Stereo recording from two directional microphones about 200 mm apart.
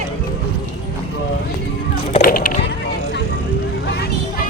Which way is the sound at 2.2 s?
45° left (ahead or behind).